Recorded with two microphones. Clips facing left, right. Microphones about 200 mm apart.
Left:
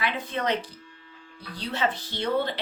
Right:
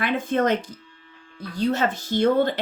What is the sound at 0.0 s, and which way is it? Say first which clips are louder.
Speech: right 7 dB; 50° right (ahead or behind).